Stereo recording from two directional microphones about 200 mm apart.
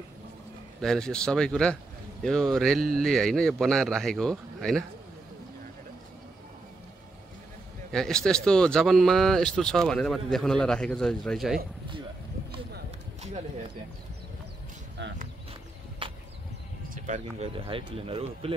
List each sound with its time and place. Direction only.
0.7 s speech: 5° left (ahead or behind)
7.9 s speech: 5° left (ahead or behind)
16.0 s a sound: 25° right (ahead or behind)
16.9 s speech: 40° right (ahead or behind)